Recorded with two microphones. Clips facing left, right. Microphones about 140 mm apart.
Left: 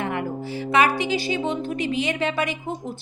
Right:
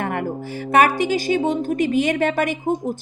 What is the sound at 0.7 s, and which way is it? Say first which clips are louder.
A woman's voice: right 4 dB; 50° right (ahead or behind).